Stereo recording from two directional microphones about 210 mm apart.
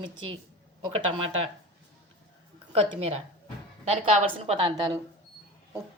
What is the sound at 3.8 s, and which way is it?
Speech, 30° right (ahead or behind).